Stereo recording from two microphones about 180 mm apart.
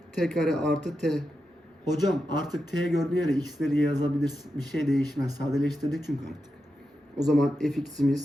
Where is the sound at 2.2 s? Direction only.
20° right (ahead or behind).